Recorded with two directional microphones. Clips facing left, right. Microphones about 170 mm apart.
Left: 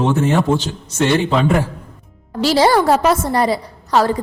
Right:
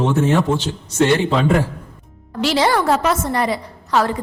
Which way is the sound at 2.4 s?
35° left (ahead or behind).